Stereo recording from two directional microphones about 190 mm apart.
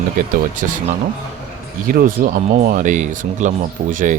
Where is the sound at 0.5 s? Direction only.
45° right (ahead or behind).